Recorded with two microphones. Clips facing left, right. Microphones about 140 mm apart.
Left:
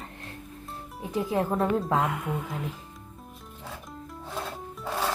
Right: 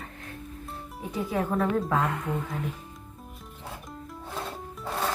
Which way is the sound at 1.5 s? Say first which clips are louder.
Even; 25° left (ahead or behind).